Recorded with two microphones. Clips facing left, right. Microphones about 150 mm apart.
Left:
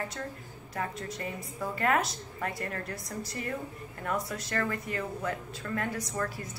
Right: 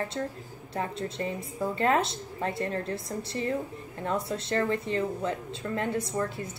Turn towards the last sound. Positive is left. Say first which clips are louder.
# right 4 dB
turn(degrees=-25)  # may be behind; listen again after turning